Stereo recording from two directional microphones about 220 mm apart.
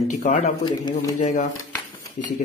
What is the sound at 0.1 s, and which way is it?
Speech, 35° left (ahead or behind).